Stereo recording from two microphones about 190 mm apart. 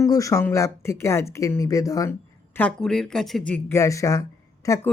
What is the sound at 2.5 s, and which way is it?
Speech, 5° left (ahead or behind).